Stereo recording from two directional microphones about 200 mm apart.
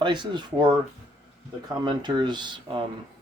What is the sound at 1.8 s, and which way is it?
Speech, 20° right (ahead or behind).